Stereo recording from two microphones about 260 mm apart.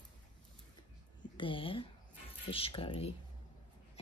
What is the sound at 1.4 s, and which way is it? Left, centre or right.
Speech, centre.